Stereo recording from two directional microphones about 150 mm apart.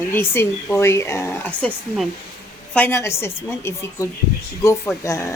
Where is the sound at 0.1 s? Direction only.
15° left (ahead or behind).